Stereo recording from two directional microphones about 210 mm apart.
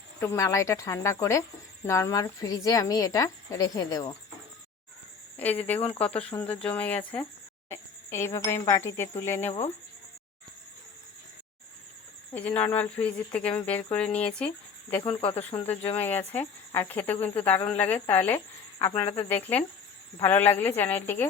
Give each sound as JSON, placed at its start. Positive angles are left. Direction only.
{"t": 0.2, "sound": "speech", "side_deg": 15}
{"t": 5.4, "sound": "speech", "side_deg": 5}
{"t": 9.5, "sound": "speech", "side_deg": 30}
{"t": 12.3, "sound": "speech", "side_deg": 5}
{"t": 15.1, "sound": "speech", "side_deg": 25}
{"t": 15.5, "sound": "speech", "side_deg": 10}